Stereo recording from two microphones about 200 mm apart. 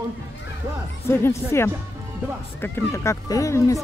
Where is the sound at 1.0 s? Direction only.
10° left (ahead or behind).